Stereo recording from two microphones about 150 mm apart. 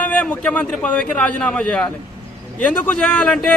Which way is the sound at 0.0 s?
10° left (ahead or behind).